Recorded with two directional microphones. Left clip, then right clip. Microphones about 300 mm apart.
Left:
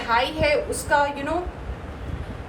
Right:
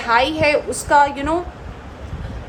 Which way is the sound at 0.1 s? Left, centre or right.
Right.